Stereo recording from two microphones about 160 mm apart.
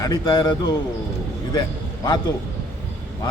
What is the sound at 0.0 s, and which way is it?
Speech, 25° left (ahead or behind).